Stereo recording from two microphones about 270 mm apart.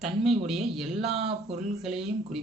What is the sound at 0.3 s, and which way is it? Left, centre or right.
Speech, centre.